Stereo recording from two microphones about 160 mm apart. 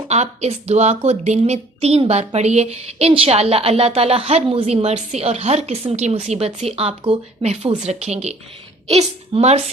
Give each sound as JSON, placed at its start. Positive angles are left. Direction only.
{"t": 0.1, "sound": "a woman's voice", "side_deg": -45}